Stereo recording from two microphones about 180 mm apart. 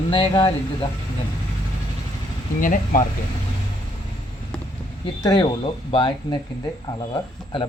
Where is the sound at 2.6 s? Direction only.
50° left (ahead or behind).